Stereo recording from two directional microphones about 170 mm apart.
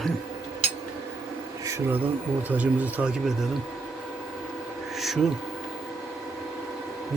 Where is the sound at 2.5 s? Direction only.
10° right (ahead or behind).